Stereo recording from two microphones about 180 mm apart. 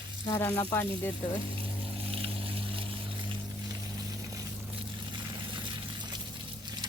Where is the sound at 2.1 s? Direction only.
30° right (ahead or behind).